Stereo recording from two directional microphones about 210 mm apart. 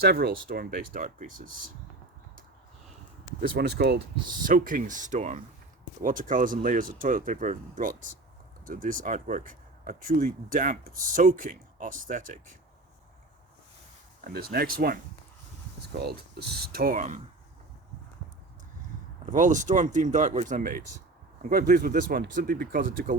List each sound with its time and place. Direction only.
0.0 s speech: 50° right (ahead or behind)
3.5 s speech: 50° right (ahead or behind)
4.4 s speech: 40° right (ahead or behind)
14.3 s speech: 45° right (ahead or behind)
19.2 s speech: 35° right (ahead or behind)